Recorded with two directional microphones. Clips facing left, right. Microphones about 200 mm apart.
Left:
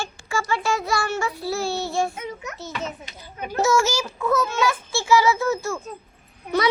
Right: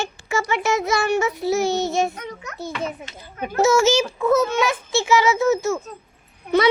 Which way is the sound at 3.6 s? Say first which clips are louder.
Right 4 dB; 25° right (ahead or behind).